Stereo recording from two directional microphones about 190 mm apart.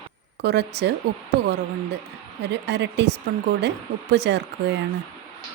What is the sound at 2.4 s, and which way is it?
A woman's voice, 65° right (ahead or behind).